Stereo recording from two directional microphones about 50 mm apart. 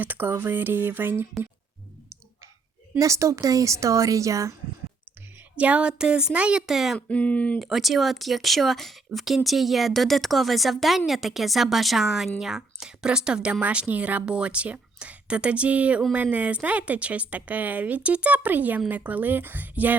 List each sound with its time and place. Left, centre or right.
0.0 s speech: right
3.0 s a woman's voice: right
5.5 s speech: right
6.6 s speech: centre
7.1 s speech: left
7.6 s speech: centre; by 20.0 s right